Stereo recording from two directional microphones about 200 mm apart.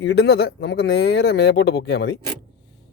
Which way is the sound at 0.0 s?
60° left (ahead or behind).